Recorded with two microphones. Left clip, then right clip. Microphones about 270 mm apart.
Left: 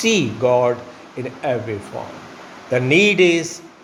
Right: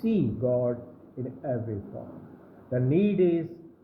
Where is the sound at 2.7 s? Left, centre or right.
Left.